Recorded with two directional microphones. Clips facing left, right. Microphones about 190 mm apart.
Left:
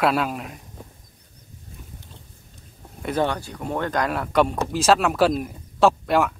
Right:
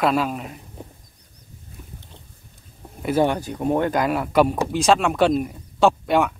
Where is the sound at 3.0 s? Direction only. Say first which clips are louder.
Right 4 dB; 10° right (ahead or behind).